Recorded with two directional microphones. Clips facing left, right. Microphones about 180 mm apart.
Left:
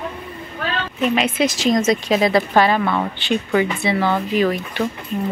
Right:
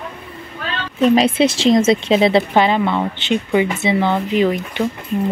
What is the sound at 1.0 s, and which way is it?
A woman's voice, 35° right (ahead or behind).